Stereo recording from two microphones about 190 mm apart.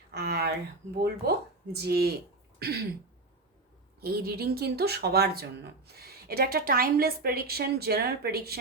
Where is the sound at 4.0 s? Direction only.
55° right (ahead or behind).